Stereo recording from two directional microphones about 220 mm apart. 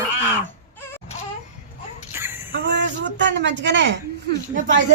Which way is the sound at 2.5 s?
55° right (ahead or behind).